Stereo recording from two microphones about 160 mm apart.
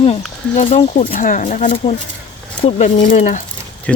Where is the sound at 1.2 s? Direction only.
55° left (ahead or behind).